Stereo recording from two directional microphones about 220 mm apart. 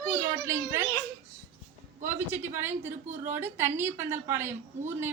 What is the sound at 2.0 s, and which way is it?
A woman's voice, 10° right (ahead or behind).